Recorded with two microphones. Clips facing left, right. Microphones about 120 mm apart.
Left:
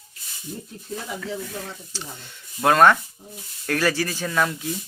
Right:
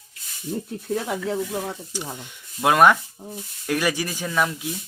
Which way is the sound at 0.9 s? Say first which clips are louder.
Right 7 dB; 60° right (ahead or behind).